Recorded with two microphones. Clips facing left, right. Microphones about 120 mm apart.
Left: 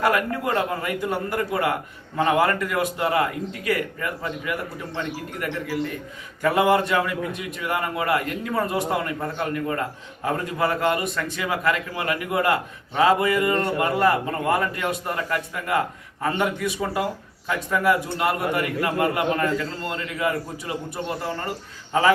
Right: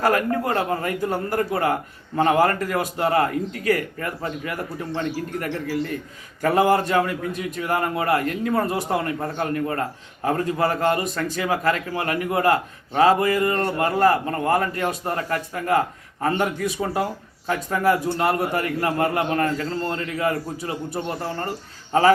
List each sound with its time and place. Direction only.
0.0 s a man's voice: 35° right (ahead or behind)